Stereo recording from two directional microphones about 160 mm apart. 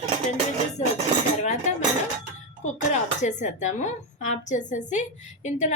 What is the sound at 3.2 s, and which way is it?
A woman's voice, 50° left (ahead or behind).